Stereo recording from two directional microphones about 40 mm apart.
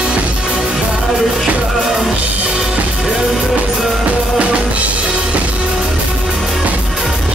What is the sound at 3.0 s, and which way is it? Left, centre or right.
Music, centre.